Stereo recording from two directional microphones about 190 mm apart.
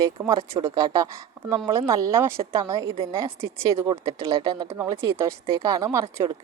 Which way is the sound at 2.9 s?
30° right (ahead or behind).